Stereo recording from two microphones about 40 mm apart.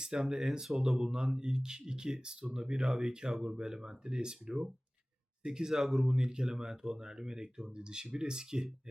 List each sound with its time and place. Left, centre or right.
0.0 s speech: centre
5.7 s speech: centre
6.0 s speech: centre